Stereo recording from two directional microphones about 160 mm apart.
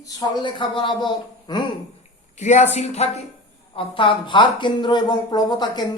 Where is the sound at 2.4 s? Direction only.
45° left (ahead or behind).